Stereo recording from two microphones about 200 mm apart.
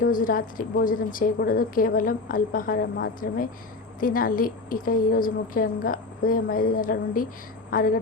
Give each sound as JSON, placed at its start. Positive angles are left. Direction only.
{"t": 0.0, "sound": "a woman's voice", "side_deg": 45}